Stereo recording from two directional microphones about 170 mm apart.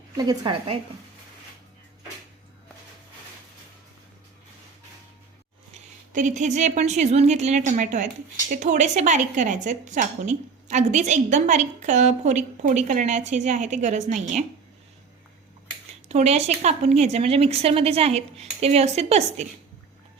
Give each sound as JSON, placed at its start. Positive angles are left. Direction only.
{"t": 0.2, "sound": "a woman's voice", "side_deg": -25}
{"t": 6.1, "sound": "a woman's voice", "side_deg": -45}
{"t": 16.0, "sound": "speech", "side_deg": -40}